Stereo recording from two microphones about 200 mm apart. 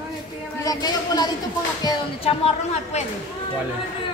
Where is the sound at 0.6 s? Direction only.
20° left (ahead or behind).